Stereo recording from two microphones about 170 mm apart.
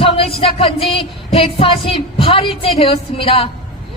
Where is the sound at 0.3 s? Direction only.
35° left (ahead or behind).